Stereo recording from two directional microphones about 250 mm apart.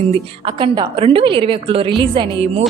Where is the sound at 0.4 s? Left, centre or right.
Centre.